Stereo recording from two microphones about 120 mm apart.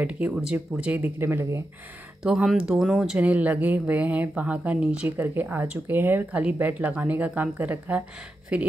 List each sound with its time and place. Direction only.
0.0 s speech: 10° right (ahead or behind)
2.2 s speech: 5° right (ahead or behind)